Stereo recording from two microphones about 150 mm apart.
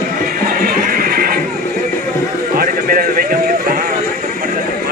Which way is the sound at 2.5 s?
80° right.